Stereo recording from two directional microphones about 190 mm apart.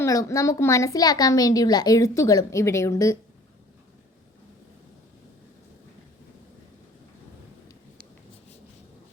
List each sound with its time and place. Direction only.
0.0 s a woman's voice: 15° left (ahead or behind)